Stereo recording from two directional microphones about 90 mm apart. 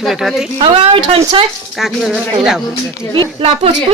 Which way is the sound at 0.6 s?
75° right (ahead or behind).